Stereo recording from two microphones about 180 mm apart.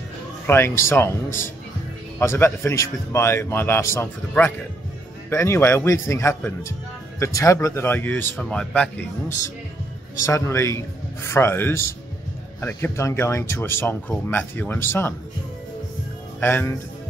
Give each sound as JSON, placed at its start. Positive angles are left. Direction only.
{"t": 0.5, "sound": "speech", "side_deg": 15}
{"t": 10.2, "sound": "speech", "side_deg": 15}
{"t": 16.3, "sound": "speech", "side_deg": 10}